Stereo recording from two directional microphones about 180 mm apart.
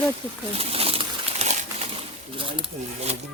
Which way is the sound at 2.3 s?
30° right (ahead or behind).